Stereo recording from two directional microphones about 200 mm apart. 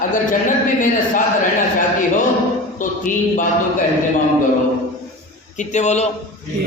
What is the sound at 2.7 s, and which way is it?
Speech, 40° left (ahead or behind).